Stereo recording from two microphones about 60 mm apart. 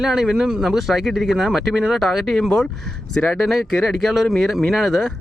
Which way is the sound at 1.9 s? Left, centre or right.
Centre.